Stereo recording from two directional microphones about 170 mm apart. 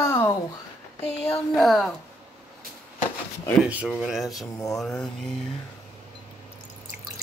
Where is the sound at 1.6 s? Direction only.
Centre (ahead or behind).